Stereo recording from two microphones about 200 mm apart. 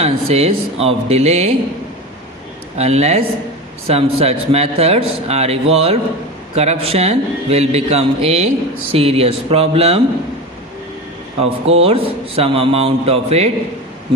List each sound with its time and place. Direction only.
0.0 s a man's voice: 30° right (ahead or behind)
2.7 s a man's voice: 35° right (ahead or behind)
11.3 s a man's voice: 30° right (ahead or behind)